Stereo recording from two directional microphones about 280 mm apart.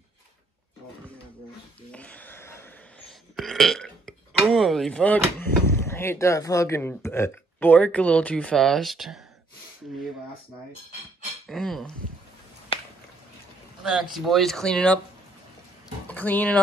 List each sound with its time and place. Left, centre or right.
1.9 s speech: centre
11.4 s speech: centre
12.7 s a sound: centre
13.8 s speech: centre
16.1 s speech: centre